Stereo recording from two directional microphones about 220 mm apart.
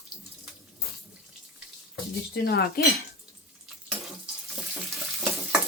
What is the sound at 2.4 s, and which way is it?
Speech, 50° left (ahead or behind).